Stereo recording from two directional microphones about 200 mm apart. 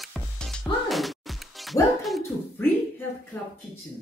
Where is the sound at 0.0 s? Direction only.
Centre (ahead or behind).